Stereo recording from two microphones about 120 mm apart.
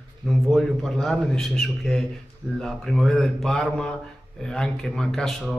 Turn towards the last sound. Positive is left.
turn(degrees=0)  # may be behind; listen again after turning